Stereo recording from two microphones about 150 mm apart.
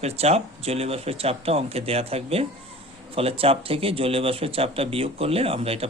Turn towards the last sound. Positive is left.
turn(degrees=-40)  # may be behind; listen again after turning